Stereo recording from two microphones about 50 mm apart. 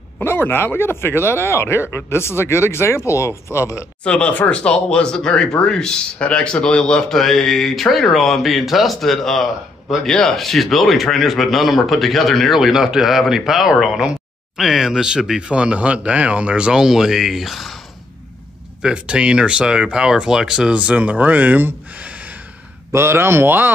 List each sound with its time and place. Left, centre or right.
0.2 s speech: left
4.0 s a man's voice: left; by 17.7 s centre
18.8 s a man's voice: centre
20.7 s speech: right
22.9 s speech: right